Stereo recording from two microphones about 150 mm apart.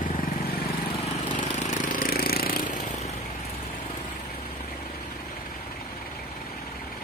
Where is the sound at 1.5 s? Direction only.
60° left (ahead or behind).